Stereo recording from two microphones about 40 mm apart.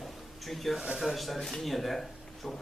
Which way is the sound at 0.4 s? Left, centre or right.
Centre.